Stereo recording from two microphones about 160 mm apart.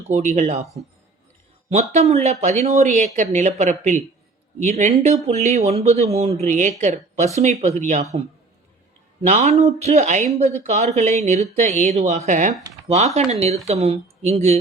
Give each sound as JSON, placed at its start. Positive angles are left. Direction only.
{"t": 0.1, "sound": "speech", "side_deg": -50}
{"t": 1.7, "sound": "speech", "side_deg": -45}
{"t": 9.2, "sound": "speech", "side_deg": -45}